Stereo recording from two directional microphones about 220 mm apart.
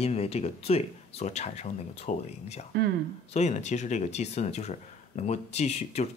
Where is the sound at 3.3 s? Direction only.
30° left (ahead or behind).